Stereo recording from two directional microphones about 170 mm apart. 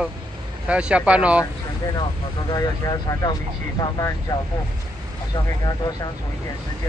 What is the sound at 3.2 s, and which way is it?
Speech, 25° left (ahead or behind).